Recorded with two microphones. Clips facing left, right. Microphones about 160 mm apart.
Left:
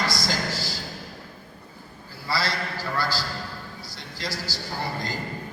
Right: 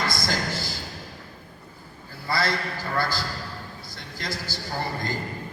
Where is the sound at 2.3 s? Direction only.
50° right (ahead or behind).